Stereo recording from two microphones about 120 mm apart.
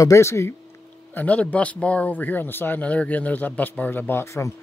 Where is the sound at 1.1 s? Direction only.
10° left (ahead or behind).